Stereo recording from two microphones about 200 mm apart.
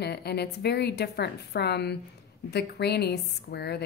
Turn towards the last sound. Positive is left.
turn(degrees=55)  # may be behind; listen again after turning